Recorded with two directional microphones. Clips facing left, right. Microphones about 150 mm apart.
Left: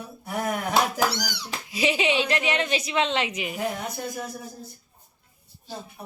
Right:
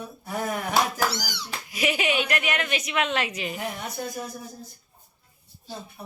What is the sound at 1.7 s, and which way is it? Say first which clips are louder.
A woman's voice: left 2 dB; 25° left (ahead or behind).